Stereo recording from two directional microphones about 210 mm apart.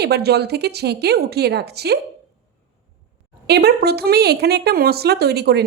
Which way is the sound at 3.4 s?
50° right (ahead or behind).